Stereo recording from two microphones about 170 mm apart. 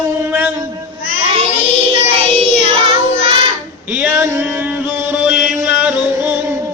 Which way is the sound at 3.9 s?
10° right (ahead or behind).